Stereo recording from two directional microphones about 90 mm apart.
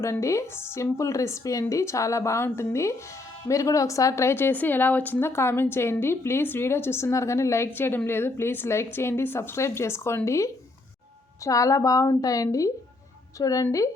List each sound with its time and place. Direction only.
0.0 s a woman's voice: 35° left (ahead or behind)